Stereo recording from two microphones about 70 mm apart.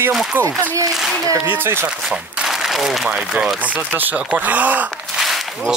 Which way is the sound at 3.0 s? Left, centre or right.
Centre.